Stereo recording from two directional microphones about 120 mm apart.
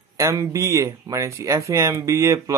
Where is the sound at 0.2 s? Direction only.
25° right (ahead or behind).